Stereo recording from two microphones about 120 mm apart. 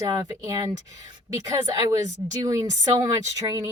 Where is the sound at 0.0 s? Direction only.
30° right (ahead or behind).